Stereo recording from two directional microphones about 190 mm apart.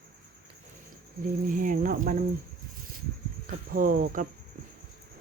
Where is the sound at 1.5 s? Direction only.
45° right (ahead or behind).